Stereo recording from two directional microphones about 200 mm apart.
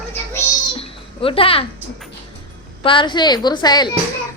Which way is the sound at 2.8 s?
25° left (ahead or behind).